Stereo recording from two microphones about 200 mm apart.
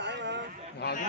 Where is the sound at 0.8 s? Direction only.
55° left (ahead or behind).